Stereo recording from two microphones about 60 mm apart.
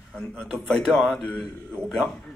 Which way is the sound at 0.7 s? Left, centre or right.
Centre.